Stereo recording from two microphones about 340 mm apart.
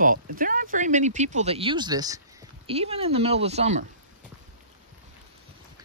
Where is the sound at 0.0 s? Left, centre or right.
Right.